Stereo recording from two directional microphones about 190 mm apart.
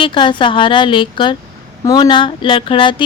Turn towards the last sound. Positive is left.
turn(degrees=25)  # may be behind; listen again after turning